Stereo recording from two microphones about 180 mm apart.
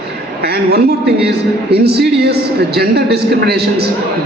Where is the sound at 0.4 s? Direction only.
65° right (ahead or behind).